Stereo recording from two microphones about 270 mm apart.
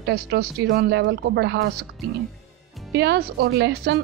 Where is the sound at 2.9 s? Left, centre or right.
Right.